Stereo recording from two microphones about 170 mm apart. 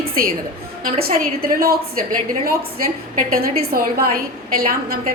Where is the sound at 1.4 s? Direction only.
60° right (ahead or behind).